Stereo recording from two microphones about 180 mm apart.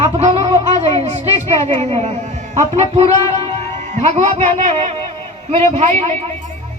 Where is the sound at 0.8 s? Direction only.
35° right (ahead or behind).